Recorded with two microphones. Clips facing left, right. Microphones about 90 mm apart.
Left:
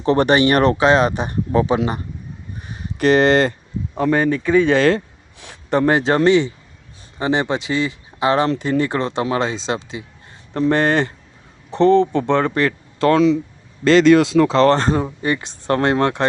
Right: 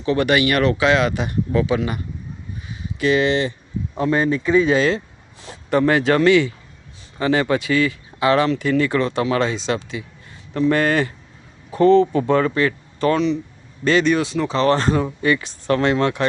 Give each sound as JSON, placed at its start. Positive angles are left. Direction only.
{"t": 0.0, "sound": "speech", "side_deg": 35}
{"t": 2.6, "sound": "a sound", "side_deg": 55}
{"t": 4.0, "sound": "speech", "side_deg": 50}
{"t": 5.7, "sound": "speech", "side_deg": 30}
{"t": 12.3, "sound": "speech", "side_deg": 60}
{"t": 13.8, "sound": "speech", "side_deg": 85}
{"t": 14.6, "sound": "speech", "side_deg": 40}